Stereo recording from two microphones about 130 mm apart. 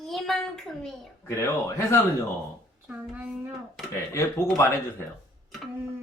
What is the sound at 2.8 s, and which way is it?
Speech, 10° right (ahead or behind).